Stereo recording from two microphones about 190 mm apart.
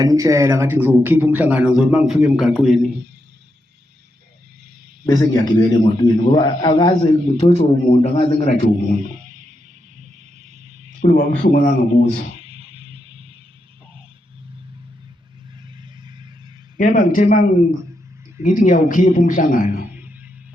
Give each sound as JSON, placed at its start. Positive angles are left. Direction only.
{"t": 0.0, "sound": "a man's voice", "side_deg": -20}
{"t": 5.0, "sound": "a man's voice", "side_deg": 20}
{"t": 9.0, "sound": "music", "side_deg": -40}
{"t": 11.0, "sound": "a man's voice", "side_deg": 50}
{"t": 12.4, "sound": "music", "side_deg": -30}
{"t": 16.7, "sound": "a man's voice", "side_deg": 45}
{"t": 18.4, "sound": "a man's voice", "side_deg": 45}
{"t": 19.9, "sound": "music", "side_deg": -10}